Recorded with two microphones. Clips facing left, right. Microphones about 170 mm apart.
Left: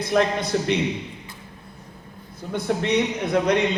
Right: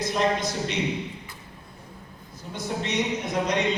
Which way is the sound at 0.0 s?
60° left (ahead or behind).